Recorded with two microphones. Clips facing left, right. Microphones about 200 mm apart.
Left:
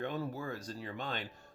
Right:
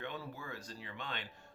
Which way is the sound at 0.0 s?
40° left (ahead or behind).